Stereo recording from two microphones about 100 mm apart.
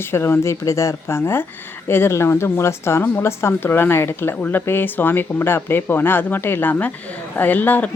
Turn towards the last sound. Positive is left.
turn(degrees=15)  # may be behind; listen again after turning